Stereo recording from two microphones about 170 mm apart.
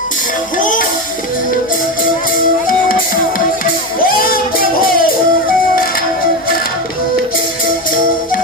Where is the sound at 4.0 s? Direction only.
60° left (ahead or behind).